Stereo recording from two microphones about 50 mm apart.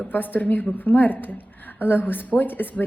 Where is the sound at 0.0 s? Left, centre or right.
Left.